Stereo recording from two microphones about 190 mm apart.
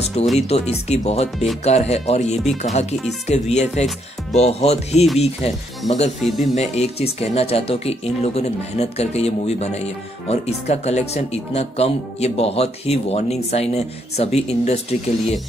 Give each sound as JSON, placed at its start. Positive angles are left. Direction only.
{"t": 0.0, "sound": "speech", "side_deg": 35}